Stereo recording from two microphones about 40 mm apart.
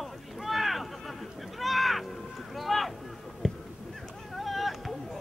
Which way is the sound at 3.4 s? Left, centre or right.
Centre.